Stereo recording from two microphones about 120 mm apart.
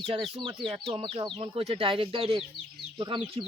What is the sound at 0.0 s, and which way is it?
Speech, 50° right (ahead or behind).